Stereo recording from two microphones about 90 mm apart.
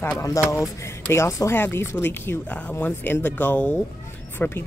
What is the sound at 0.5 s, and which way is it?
Speech, 35° left (ahead or behind).